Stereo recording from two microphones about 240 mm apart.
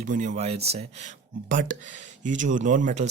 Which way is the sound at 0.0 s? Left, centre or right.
Right.